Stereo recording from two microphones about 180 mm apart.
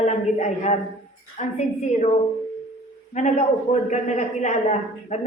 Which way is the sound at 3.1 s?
40° left (ahead or behind).